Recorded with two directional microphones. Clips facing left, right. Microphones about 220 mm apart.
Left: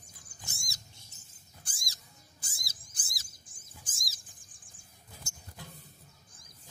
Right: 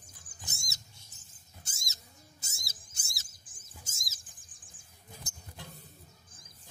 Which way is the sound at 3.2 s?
Centre (ahead or behind).